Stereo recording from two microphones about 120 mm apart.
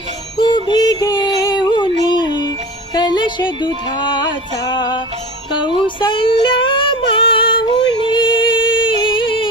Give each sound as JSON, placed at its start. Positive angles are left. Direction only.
{"t": 0.3, "sound": "music", "side_deg": 40}